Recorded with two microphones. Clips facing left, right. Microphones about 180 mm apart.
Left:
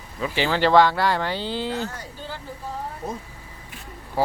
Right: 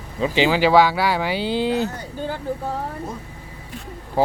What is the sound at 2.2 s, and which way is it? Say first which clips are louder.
Speech: right 10 dB; 55° right (ahead or behind).